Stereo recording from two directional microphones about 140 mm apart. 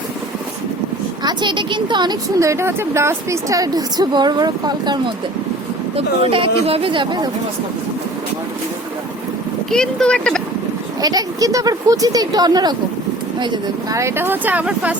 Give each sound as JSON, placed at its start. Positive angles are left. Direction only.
{"t": 1.2, "sound": "a woman's voice", "side_deg": -30}
{"t": 6.2, "sound": "speech", "side_deg": -40}
{"t": 9.7, "sound": "speech", "side_deg": 5}
{"t": 11.0, "sound": "a woman's voice", "side_deg": -25}
{"t": 14.0, "sound": "speech", "side_deg": -15}